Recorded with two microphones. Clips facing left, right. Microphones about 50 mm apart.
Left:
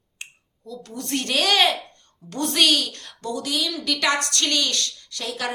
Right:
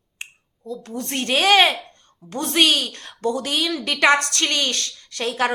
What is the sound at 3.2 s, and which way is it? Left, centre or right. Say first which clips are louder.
A woman's voice: right 4 dB; right.